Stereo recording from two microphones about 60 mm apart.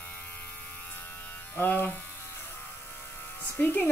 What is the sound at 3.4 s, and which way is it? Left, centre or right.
Speech, left.